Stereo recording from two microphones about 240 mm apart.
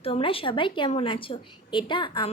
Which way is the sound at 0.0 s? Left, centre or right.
Left.